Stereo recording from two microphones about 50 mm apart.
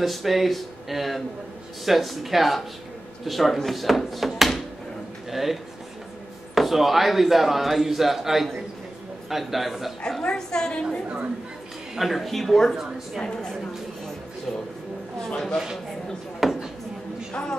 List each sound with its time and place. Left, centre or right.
0.0 s speech: centre
10.2 s a woman's voice: centre
11.9 s speech: centre
13.2 s a woman's voice: centre
15.3 s a woman's voice: centre
16.4 s a sound: centre
17.3 s speech: centre